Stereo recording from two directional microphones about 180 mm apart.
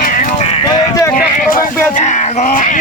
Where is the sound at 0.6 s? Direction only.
20° left (ahead or behind).